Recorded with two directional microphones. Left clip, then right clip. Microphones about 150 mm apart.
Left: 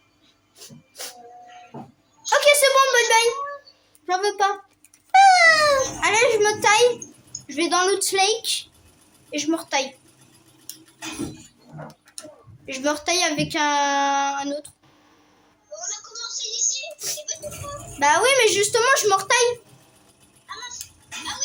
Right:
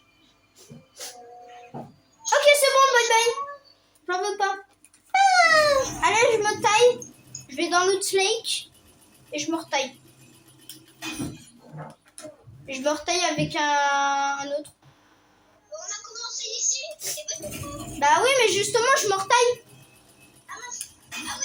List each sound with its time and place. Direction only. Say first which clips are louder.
1.0 s music: left 3 dB; 55° left (ahead or behind)
2.3 s a sound: left 2 dB; 50° left (ahead or behind)
9.3 s a woman's voice: left 3 dB; 50° left (ahead or behind)
11.0 s a sound: even; centre (ahead or behind)
12.6 s a woman's voice: left 2 dB; 50° left (ahead or behind)
16.5 s a sound: left 2 dB; 40° left (ahead or behind)
17.0 s music: left 3 dB; 55° left (ahead or behind)
17.4 s music: left 2 dB; centre (ahead or behind)
18.0 s a woman's voice: left 2 dB; 50° left (ahead or behind)